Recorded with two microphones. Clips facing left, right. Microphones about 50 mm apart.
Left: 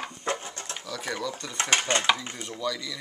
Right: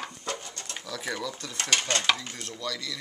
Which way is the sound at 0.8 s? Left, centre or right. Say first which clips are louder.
Left 1 dB; centre.